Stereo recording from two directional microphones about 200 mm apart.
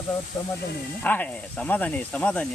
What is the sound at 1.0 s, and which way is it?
Speech, 10° left (ahead or behind).